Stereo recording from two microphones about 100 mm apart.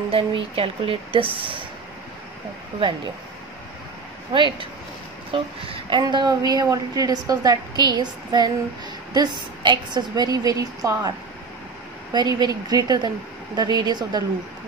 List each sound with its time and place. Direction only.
0.1 s a woman's voice: 65° right (ahead or behind)
4.3 s a woman's voice: 55° right (ahead or behind)